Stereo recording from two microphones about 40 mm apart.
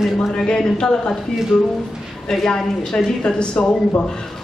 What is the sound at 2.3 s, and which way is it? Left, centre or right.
A man's voice, centre.